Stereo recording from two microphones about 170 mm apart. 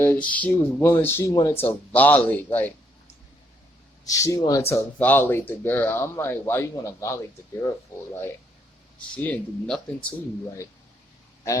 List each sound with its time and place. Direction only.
0.0 s speech: 10° left (ahead or behind)
4.0 s speech: 20° left (ahead or behind)
9.0 s speech: 10° left (ahead or behind)